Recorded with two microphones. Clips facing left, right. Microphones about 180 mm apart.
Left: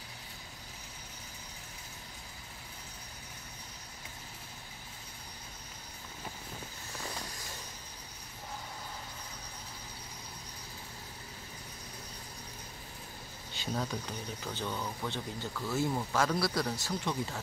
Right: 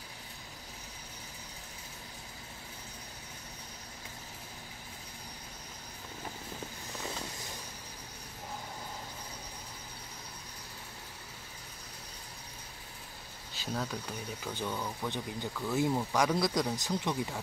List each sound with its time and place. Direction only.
13.5 s speech: centre (ahead or behind)